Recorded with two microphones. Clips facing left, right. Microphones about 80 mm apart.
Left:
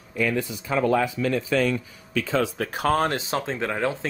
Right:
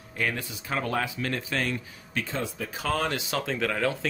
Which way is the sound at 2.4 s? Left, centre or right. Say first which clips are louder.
Left 7 dB; left.